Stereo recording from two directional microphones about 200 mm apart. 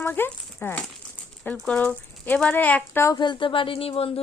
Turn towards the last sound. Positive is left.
turn(degrees=30)  # may be behind; listen again after turning